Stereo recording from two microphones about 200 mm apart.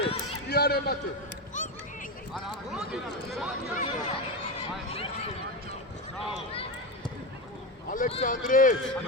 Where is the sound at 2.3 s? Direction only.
Centre (ahead or behind).